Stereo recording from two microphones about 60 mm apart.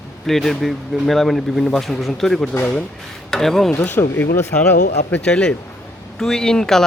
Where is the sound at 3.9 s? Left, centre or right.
Left.